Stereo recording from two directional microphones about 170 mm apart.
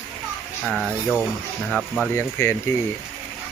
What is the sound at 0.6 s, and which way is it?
Speech, centre (ahead or behind).